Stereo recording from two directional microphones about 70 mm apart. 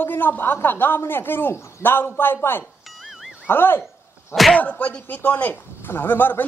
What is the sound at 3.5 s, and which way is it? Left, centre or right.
Speech, left.